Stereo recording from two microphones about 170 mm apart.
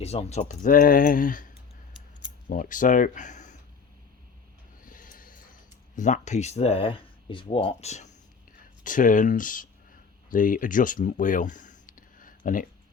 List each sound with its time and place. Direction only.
0.0 s speech: 40° left (ahead or behind)
2.5 s speech: 50° left (ahead or behind)
4.8 s a sound: 55° left (ahead or behind)
6.0 s speech: 45° left (ahead or behind)